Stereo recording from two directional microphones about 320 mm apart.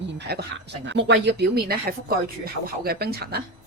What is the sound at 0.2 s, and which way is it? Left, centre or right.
A woman's voice, right.